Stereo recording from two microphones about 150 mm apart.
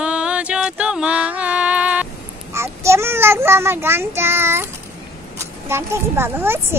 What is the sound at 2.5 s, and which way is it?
Child singing, 20° right (ahead or behind).